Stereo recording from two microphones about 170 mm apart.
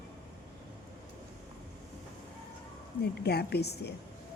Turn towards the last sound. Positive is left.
turn(degrees=75)  # may be behind; listen again after turning